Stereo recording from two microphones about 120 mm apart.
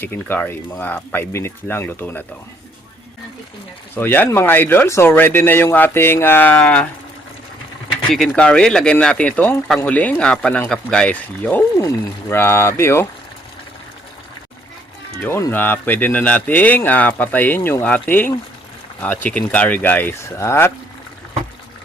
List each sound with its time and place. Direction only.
0.0 s speech: 15° left (ahead or behind)
3.9 s speech: 15° left (ahead or behind)
8.1 s speech: centre (ahead or behind)
11.8 s speech: 20° left (ahead or behind)
15.3 s speech: 20° left (ahead or behind)